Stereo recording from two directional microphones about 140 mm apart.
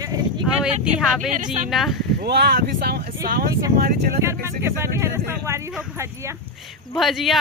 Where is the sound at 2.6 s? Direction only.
90° right.